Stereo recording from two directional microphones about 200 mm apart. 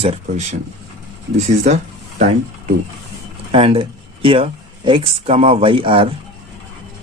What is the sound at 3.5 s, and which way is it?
Speech, 25° right (ahead or behind).